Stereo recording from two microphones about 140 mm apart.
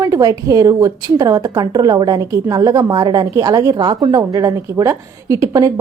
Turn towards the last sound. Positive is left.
turn(degrees=-25)  # may be behind; listen again after turning